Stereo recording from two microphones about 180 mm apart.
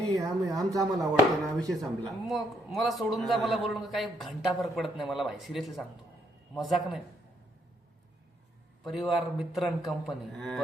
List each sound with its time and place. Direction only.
0.2 s speech: 20° right (ahead or behind)
1.5 s speech: centre (ahead or behind)
8.8 s speech: centre (ahead or behind)